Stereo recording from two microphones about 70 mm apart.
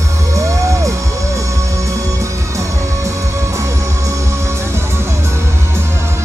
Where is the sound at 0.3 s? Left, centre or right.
Right.